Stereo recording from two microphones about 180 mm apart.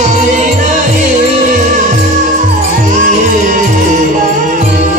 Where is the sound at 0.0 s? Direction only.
45° right (ahead or behind).